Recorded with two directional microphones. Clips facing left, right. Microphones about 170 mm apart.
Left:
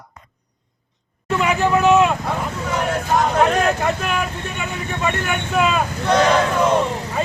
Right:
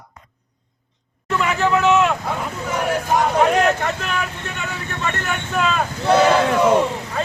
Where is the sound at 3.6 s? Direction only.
10° left (ahead or behind).